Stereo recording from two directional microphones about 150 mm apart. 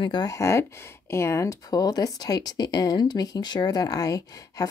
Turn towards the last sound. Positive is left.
turn(degrees=25)  # may be behind; listen again after turning